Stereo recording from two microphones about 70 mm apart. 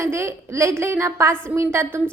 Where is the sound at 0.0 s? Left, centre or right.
Right.